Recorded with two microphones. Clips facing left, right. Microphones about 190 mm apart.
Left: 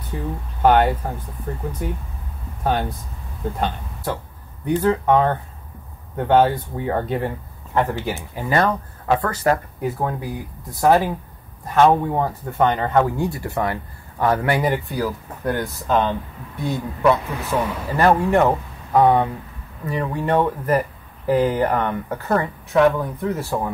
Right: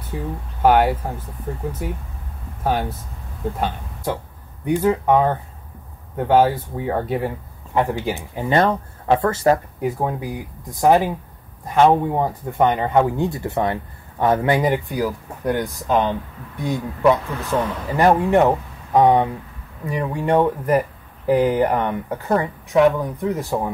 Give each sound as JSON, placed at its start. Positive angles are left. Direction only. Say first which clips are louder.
{"t": 0.1, "sound": "speech", "louder": "even", "side_deg": -5}
{"t": 17.3, "sound": "speech", "louder": "right 1 dB", "side_deg": 10}
{"t": 17.9, "sound": "speech", "louder": "right 1 dB", "side_deg": -15}